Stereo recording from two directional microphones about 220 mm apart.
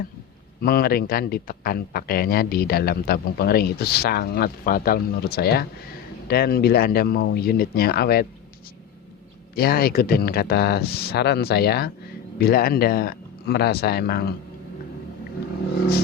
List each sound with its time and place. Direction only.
0.6 s a man's voice: 45° left (ahead or behind)
9.6 s a man's voice: 45° left (ahead or behind)